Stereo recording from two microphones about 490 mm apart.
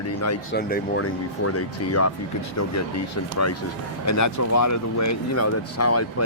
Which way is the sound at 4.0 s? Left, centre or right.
Left.